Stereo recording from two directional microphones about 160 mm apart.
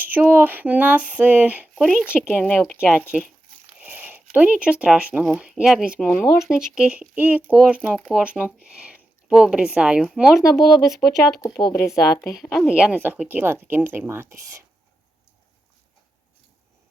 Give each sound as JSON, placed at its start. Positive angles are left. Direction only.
{"t": 0.0, "sound": "speech", "side_deg": -10}
{"t": 2.8, "sound": "speech", "side_deg": -5}
{"t": 6.0, "sound": "speech", "side_deg": 10}
{"t": 6.7, "sound": "speech", "side_deg": -5}
{"t": 8.2, "sound": "speech", "side_deg": -10}
{"t": 11.4, "sound": "speech", "side_deg": 25}
{"t": 11.7, "sound": "speech", "side_deg": 10}
{"t": 12.4, "sound": "speech", "side_deg": 0}